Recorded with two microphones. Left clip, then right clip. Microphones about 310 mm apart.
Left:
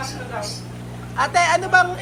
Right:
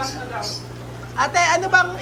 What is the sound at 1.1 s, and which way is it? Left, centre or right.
Speech, centre.